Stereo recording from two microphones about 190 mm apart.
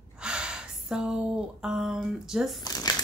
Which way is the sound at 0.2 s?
5° right (ahead or behind).